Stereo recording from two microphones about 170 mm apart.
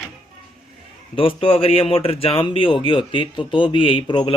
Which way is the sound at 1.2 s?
30° left (ahead or behind).